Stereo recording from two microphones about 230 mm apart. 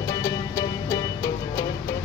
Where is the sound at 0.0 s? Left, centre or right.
Centre.